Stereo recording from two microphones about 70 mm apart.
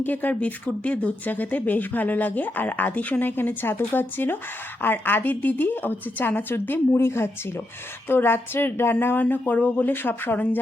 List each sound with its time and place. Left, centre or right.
0.0 s speech: left